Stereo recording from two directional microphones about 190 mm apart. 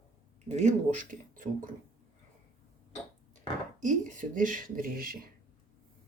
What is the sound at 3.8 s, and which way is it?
Speech, 40° right (ahead or behind).